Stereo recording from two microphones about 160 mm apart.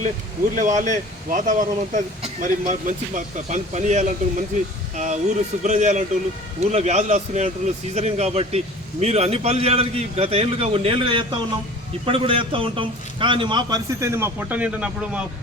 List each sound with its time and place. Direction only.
0.5 s a man's voice: 50° right (ahead or behind); by 15.2 s 10° right (ahead or behind)